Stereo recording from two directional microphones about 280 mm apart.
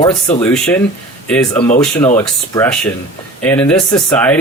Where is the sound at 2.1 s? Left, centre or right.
Centre.